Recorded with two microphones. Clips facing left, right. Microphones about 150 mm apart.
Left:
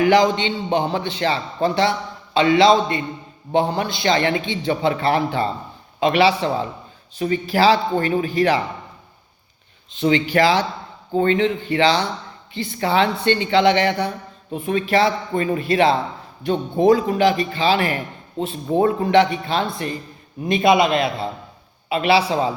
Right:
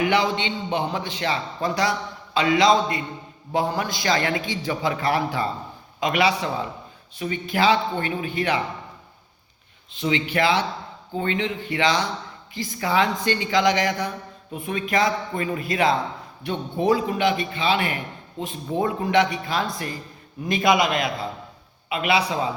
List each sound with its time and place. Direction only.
0.0 s a man's voice: 35° left (ahead or behind)
10.0 s a man's voice: 35° left (ahead or behind)